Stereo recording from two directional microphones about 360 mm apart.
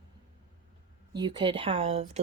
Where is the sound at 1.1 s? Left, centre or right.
Centre.